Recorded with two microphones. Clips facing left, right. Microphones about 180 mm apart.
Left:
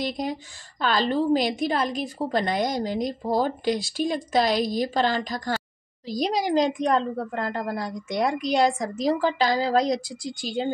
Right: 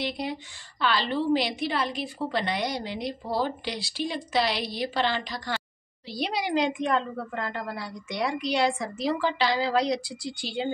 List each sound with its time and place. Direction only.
0.0 s a woman's voice: 45° left (ahead or behind)